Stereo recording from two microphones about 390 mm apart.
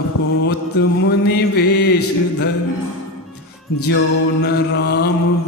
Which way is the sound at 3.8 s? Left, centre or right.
Left.